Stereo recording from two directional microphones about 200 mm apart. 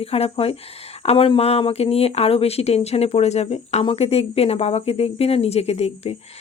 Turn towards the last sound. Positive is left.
turn(degrees=30)  # may be behind; listen again after turning